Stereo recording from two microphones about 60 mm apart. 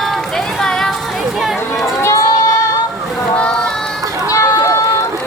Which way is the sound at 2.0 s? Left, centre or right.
Left.